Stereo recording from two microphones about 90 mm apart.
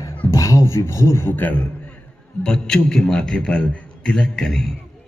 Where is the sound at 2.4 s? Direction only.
10° left (ahead or behind).